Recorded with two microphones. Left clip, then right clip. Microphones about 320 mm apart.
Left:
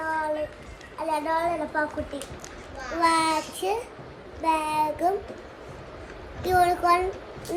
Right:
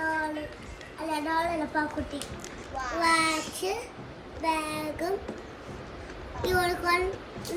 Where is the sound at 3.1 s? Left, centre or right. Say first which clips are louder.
Right 1 dB; centre.